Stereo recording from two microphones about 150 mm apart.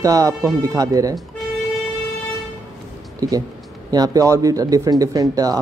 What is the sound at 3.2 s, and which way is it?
Speech, 25° right (ahead or behind).